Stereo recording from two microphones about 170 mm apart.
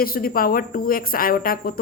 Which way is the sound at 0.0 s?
60° left (ahead or behind).